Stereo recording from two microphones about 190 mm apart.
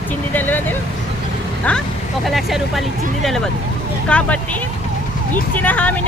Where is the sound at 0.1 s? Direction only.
10° left (ahead or behind).